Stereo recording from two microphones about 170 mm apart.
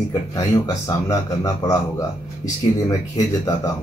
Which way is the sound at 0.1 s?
20° left (ahead or behind).